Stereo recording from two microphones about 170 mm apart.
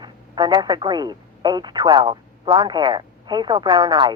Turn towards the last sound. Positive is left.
turn(degrees=-25)  # may be behind; listen again after turning